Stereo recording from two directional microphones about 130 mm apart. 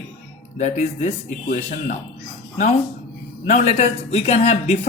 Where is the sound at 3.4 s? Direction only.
60° left (ahead or behind).